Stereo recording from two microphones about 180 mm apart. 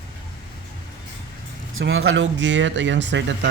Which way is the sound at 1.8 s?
90° right.